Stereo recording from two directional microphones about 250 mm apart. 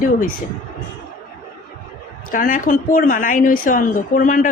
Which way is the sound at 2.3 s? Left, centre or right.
Left.